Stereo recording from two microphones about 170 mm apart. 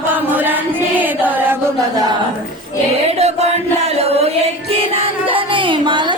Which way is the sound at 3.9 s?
35° right (ahead or behind).